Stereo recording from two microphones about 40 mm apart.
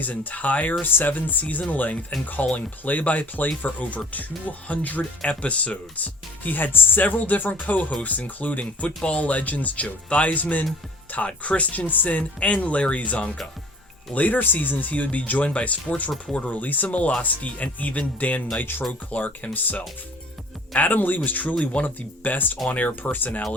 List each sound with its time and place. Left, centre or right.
0.0 s speech: left
11.9 s speech: left
12.1 s speech: left
14.1 s speech: left
18.6 s speech: left
18.9 s speech: left